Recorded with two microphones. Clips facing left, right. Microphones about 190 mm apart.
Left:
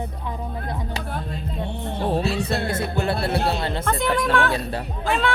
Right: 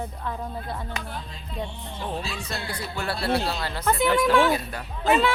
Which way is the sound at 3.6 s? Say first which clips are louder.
Left 5 dB; 25° left (ahead or behind).